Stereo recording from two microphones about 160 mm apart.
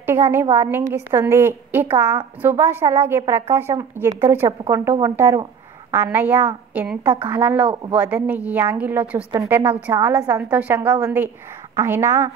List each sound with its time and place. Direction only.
0.0 s a woman's voice: 15° right (ahead or behind)